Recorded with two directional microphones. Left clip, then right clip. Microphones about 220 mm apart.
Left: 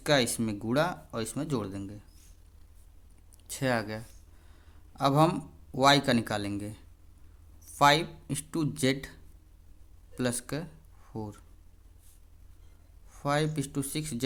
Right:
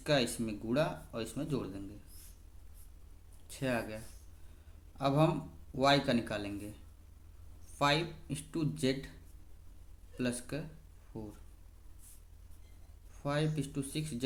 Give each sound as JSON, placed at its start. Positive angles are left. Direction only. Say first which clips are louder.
{"t": 0.0, "sound": "speech", "louder": "left 5 dB", "side_deg": 45}
{"t": 3.4, "sound": "a man's voice", "louder": "left 6 dB", "side_deg": 45}
{"t": 7.8, "sound": "speech", "louder": "left 8 dB", "side_deg": 40}
{"t": 10.2, "sound": "speech", "louder": "left 5 dB", "side_deg": 40}
{"t": 13.1, "sound": "speech", "louder": "left 6 dB", "side_deg": 40}